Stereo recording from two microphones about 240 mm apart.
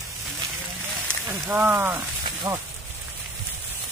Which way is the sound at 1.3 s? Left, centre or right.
Centre.